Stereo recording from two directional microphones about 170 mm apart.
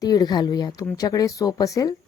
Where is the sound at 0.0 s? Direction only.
20° left (ahead or behind).